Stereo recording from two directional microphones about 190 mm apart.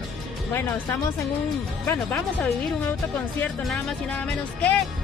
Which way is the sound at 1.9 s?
10° left (ahead or behind).